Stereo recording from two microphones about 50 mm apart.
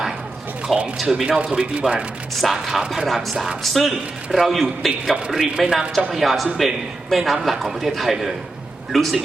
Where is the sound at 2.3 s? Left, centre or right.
Centre.